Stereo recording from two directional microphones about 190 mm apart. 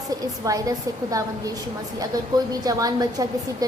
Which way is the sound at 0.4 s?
20° right (ahead or behind).